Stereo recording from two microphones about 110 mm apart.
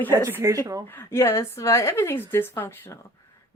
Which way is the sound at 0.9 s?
20° left (ahead or behind).